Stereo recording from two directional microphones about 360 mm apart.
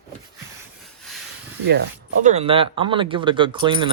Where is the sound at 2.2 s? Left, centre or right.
Centre.